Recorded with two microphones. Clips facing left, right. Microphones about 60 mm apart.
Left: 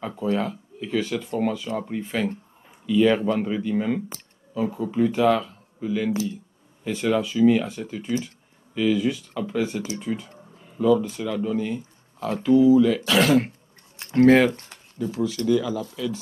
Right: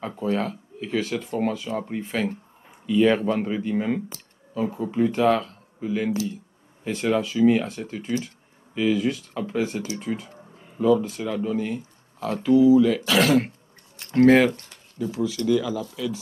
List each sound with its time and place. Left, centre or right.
0.0 s speech: centre
5.8 s speech: centre
7.2 s speech: centre
9.3 s speech: centre
9.9 s speech: centre
10.6 s a sound: centre
11.2 s speech: centre